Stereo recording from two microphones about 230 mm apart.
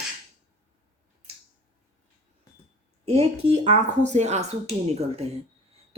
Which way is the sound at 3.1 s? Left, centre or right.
Right.